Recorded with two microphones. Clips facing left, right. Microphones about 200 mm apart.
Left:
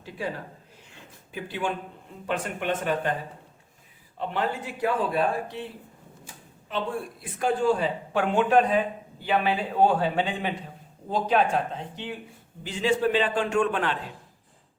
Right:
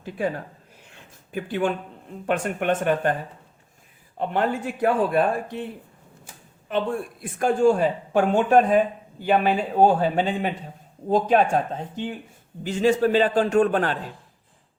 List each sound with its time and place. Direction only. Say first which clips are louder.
1.3 s speech: right 6 dB; 50° right (ahead or behind)
4.2 s speech: right 5 dB; 50° right (ahead or behind)
7.2 s a man's voice: right 5 dB; 45° right (ahead or behind)